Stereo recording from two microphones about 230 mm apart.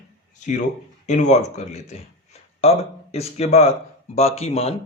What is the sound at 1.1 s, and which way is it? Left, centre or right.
Speech, left.